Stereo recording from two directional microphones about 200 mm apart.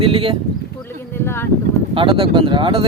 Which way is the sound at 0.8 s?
10° left (ahead or behind).